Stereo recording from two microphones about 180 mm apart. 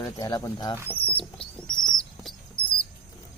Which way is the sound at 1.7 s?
5° left (ahead or behind).